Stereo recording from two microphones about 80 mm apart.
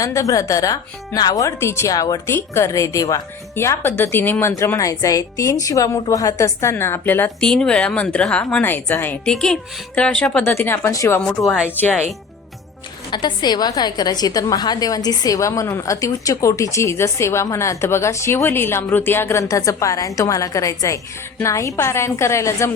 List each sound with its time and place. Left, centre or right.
0.0 s speech: left
1.5 s speech: left
1.9 s speech: left
2.2 s speech: left
3.5 s speech: left
7.3 s speech: centre
9.2 s speech: centre
10.4 s speech: left
10.9 s speech: left
13.1 s a woman's voice: left
15.4 s speech: left